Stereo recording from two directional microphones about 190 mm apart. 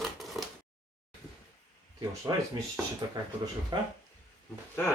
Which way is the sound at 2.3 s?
20° right (ahead or behind).